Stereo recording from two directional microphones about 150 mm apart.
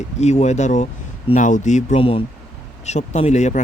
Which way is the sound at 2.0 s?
40° left (ahead or behind).